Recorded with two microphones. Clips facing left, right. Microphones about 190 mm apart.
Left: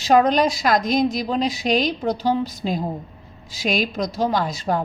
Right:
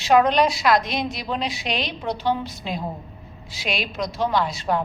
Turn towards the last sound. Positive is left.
turn(degrees=40)  # may be behind; listen again after turning